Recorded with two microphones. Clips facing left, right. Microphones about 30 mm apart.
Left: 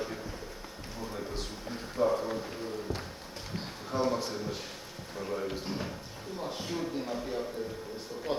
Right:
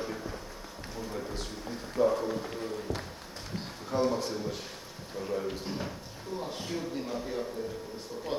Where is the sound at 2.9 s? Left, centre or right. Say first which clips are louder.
Right 2 dB; left.